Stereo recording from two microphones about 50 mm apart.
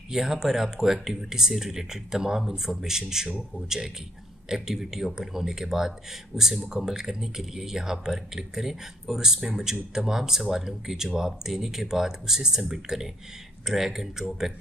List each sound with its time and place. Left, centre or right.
0.1 s speech: centre